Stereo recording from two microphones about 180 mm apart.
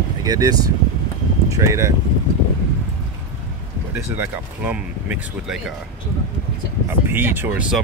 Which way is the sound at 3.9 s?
10° right (ahead or behind).